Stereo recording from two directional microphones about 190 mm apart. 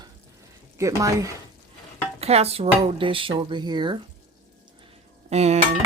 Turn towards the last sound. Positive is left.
turn(degrees=-35)  # may be behind; listen again after turning